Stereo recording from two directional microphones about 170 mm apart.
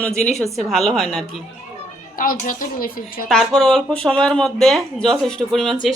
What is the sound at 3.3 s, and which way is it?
Speech, centre (ahead or behind).